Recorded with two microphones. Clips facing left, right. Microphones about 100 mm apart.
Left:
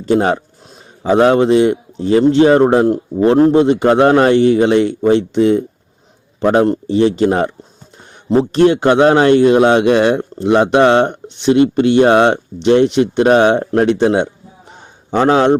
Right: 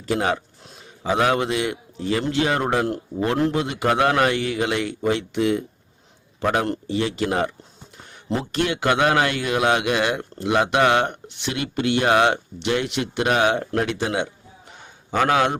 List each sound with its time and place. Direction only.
0.0 s a man's voice: 35° left (ahead or behind)